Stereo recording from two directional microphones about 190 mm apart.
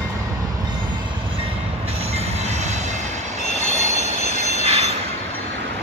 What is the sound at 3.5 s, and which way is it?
Train, 35° left (ahead or behind).